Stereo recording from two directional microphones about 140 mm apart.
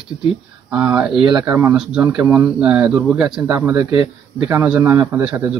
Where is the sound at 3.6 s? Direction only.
15° right (ahead or behind).